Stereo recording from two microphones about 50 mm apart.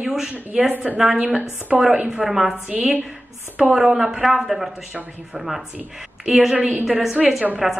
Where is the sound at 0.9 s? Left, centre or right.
Right.